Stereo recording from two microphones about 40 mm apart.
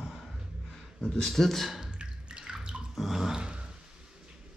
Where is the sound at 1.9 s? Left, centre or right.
Right.